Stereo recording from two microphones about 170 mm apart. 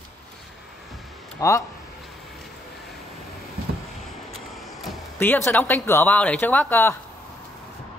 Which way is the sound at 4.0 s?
Centre (ahead or behind).